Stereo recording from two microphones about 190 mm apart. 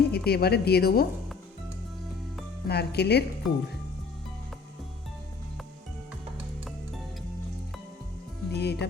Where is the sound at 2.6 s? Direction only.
60° left (ahead or behind).